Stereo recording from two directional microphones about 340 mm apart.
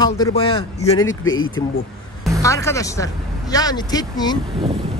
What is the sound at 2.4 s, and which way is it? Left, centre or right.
Speech, centre.